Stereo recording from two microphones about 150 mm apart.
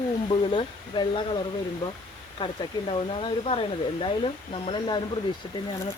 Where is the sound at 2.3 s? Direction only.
35° left (ahead or behind).